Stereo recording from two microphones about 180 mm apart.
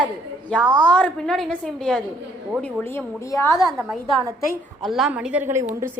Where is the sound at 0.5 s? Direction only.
5° left (ahead or behind).